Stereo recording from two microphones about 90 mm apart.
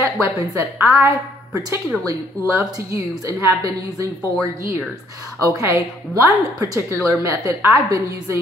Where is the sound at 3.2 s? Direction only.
40° right (ahead or behind).